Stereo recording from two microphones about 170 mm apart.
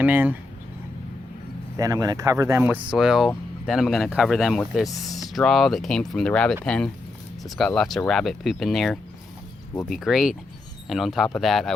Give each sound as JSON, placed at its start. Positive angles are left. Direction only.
{"t": 0.0, "sound": "speech", "side_deg": -10}
{"t": 1.7, "sound": "speech", "side_deg": -20}
{"t": 2.6, "sound": "speech", "side_deg": -5}